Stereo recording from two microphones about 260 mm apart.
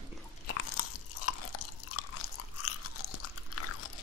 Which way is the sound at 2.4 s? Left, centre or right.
Left.